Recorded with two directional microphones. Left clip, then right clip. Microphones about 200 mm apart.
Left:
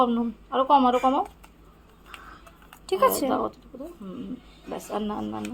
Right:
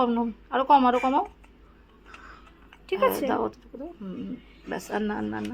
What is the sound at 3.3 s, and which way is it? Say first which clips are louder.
Speech: left 1 dB; 20° right (ahead or behind).